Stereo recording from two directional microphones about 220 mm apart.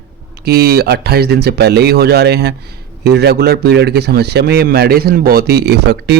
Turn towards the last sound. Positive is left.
turn(degrees=-50)  # may be behind; listen again after turning